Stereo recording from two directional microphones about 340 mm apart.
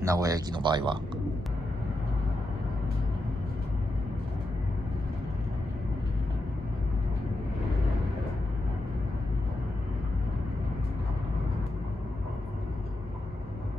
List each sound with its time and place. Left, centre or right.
0.0 s speech: centre